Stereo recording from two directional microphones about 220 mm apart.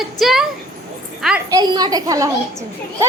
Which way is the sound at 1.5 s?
20° right (ahead or behind).